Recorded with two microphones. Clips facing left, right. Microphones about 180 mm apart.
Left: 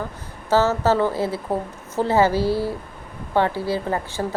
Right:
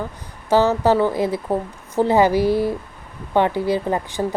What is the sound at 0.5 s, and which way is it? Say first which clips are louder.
A woman's voice: right 2 dB; 15° right (ahead or behind).